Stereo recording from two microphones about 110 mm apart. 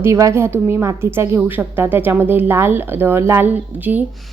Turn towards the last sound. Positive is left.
turn(degrees=-15)  # may be behind; listen again after turning